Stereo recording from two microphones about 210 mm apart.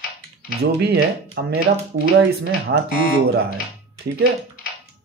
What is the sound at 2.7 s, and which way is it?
Speech, 55° right (ahead or behind).